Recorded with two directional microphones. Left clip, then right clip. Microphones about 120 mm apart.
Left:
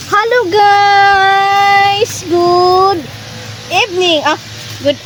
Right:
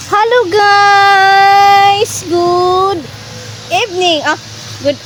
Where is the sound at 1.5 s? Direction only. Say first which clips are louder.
Right 3 dB; 40° right (ahead or behind).